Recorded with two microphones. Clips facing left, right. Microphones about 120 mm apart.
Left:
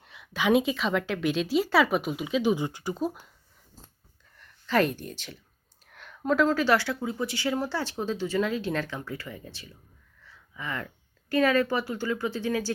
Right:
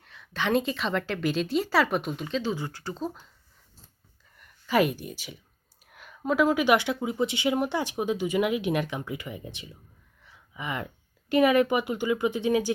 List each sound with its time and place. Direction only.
0.0 s a woman's voice: 15° left (ahead or behind)
4.4 s speech: 10° right (ahead or behind)